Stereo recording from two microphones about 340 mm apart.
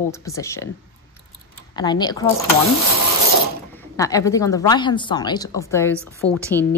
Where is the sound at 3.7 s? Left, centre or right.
Centre.